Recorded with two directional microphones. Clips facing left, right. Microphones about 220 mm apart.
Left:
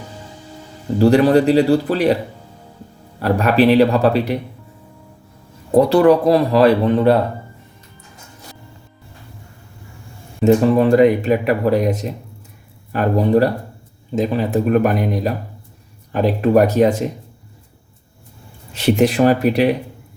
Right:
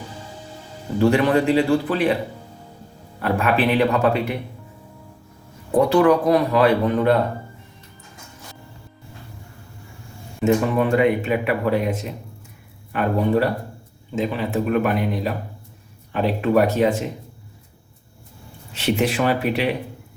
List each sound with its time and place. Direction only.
0.9 s speech: 35° left (ahead or behind)
3.2 s speech: 40° left (ahead or behind)
5.7 s speech: 35° left (ahead or behind)
10.4 s speech: 35° left (ahead or behind)
18.7 s speech: 40° left (ahead or behind)